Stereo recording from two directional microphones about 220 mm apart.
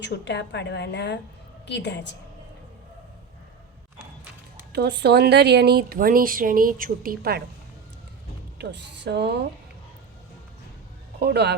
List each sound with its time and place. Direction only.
0.0 s a woman's voice: 50° left (ahead or behind)
4.7 s speech: 50° right (ahead or behind)
8.5 s speech: 50° right (ahead or behind)
11.2 s speech: 45° right (ahead or behind)